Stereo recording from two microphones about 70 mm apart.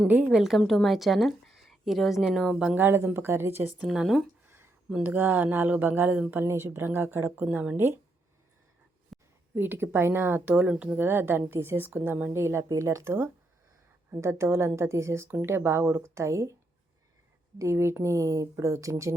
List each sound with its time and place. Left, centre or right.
0.3 s speech: centre
2.7 s speech: right
3.8 s speech: centre
4.4 s a sound: right
5.0 s speech: right
9.1 s a sound: centre
9.6 s speech: right; by 10.9 s centre
10.9 s speech: right
12.3 s speech: right
17.6 s speech: right